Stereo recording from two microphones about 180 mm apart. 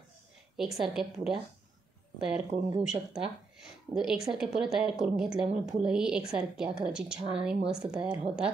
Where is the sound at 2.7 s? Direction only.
20° right (ahead or behind).